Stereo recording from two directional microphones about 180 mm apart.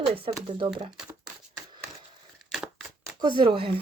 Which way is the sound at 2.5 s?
Centre (ahead or behind).